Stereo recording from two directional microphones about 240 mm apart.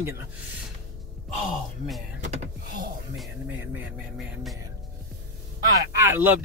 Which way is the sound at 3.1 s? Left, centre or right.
Centre.